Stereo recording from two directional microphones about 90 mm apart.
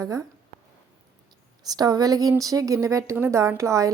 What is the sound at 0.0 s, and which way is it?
Speech, 35° right (ahead or behind).